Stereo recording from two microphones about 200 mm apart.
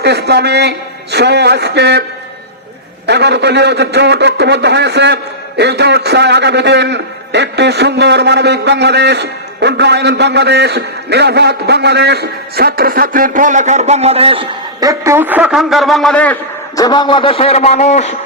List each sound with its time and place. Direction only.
0.0 s a man's voice: 55° right (ahead or behind)
3.1 s a man's voice: 55° right (ahead or behind); by 16.8 s 10° left (ahead or behind)
16.8 s a man's voice: 20° left (ahead or behind)